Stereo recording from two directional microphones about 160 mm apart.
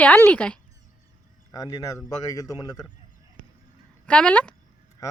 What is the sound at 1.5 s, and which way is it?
Speech, 25° left (ahead or behind).